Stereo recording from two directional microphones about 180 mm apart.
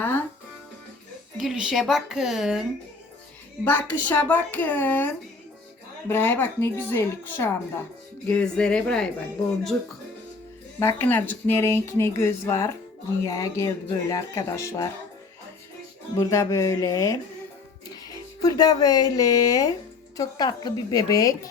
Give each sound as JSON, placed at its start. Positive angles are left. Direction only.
{"t": 0.0, "sound": "music", "side_deg": 10}
{"t": 1.4, "sound": "a woman's voice", "side_deg": -5}
{"t": 3.6, "sound": "a woman's voice", "side_deg": 10}
{"t": 10.8, "sound": "speech", "side_deg": 15}
{"t": 16.1, "sound": "a woman's voice", "side_deg": 15}